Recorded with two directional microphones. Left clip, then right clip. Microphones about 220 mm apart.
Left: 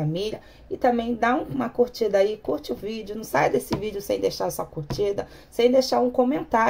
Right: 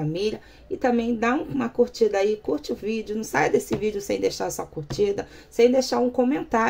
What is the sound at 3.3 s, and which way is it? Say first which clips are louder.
Speech: even; 35° right (ahead or behind).